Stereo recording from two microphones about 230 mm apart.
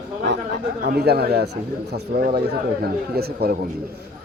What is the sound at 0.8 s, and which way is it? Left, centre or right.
A man's voice, right.